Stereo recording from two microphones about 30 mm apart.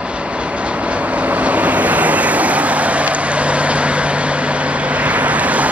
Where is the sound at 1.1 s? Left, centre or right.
Right.